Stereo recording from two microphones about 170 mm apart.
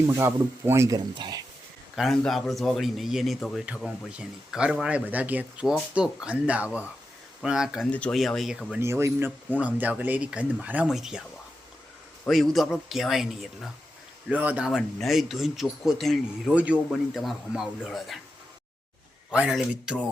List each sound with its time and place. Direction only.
0.1 s speech: 15° right (ahead or behind)
2.0 s a man's voice: centre (ahead or behind)
7.9 s a man's voice: 5° left (ahead or behind)
8.8 s speech: 15° right (ahead or behind)
12.3 s a man's voice: centre (ahead or behind)
19.3 s a man's voice: 5° right (ahead or behind)